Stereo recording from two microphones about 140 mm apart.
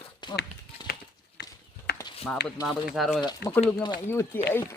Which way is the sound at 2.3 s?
5° left (ahead or behind).